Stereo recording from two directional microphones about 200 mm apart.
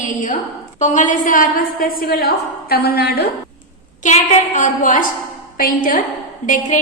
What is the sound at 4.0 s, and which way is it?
A woman's voice, 35° left (ahead or behind).